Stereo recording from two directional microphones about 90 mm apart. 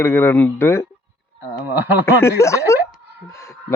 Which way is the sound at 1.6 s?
20° right (ahead or behind).